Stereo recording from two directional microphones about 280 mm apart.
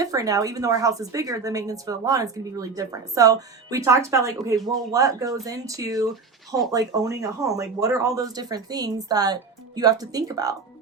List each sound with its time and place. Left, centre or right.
0.0 s a woman's voice: centre